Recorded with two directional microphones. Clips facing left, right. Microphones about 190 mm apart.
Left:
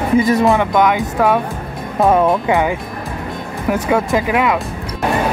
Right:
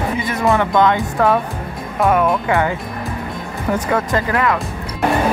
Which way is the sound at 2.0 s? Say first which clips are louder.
Left 3 dB; 25° left (ahead or behind).